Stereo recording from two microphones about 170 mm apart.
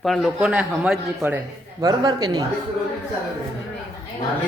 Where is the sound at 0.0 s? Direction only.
Centre (ahead or behind).